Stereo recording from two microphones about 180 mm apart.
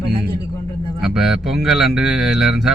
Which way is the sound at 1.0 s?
5° right (ahead or behind).